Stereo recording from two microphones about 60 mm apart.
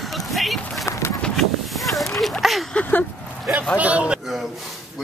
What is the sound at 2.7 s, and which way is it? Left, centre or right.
Speech, left.